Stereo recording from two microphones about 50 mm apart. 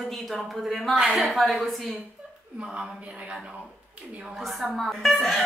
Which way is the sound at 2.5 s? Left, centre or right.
Centre.